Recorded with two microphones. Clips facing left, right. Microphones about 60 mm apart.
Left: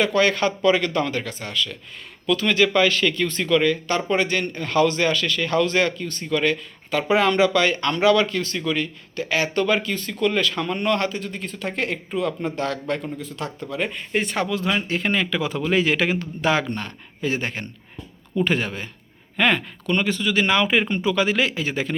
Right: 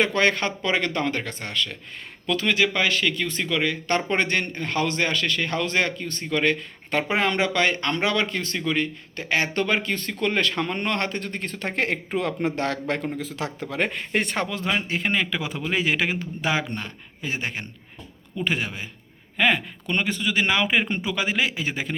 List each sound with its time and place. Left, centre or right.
0.0 s speech: right
2.5 s a man's voice: centre
3.8 s a man's voice: right
13.1 s speech: right
14.3 s speech: right; by 19.6 s centre
19.9 s a man's voice: right